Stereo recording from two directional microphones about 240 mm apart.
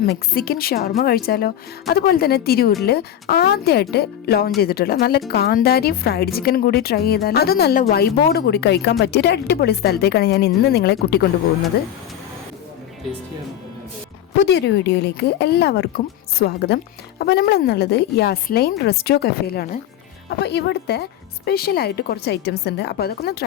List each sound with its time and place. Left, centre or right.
0.3 s speech: left
14.4 s speech: left